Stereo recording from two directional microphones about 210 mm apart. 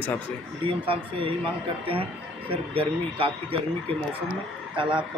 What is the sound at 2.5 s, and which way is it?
Speech, 25° right (ahead or behind).